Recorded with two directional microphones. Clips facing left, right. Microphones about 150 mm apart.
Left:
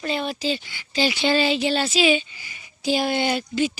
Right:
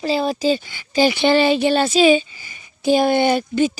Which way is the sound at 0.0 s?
35° right (ahead or behind).